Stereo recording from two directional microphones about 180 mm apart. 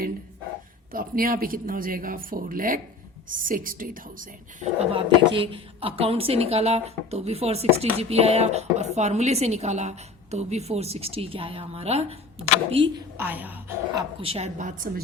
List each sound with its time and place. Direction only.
0.9 s speech: 55° right (ahead or behind)
4.6 s a woman's voice: 30° right (ahead or behind)
13.1 s speech: 10° right (ahead or behind)
14.2 s a woman's voice: 35° right (ahead or behind)